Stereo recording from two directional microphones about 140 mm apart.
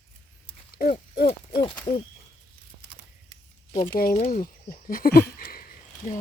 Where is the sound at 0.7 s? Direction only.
90° left.